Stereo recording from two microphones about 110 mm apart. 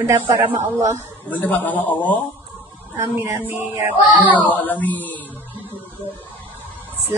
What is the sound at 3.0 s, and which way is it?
Speech, 20° right (ahead or behind).